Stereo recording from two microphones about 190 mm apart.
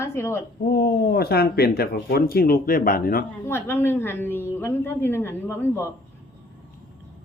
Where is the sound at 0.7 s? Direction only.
55° left (ahead or behind).